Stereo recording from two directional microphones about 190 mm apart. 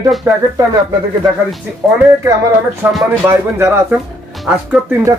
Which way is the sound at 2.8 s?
10° right (ahead or behind).